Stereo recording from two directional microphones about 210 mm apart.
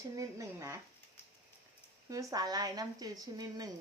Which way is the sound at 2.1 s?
15° right (ahead or behind).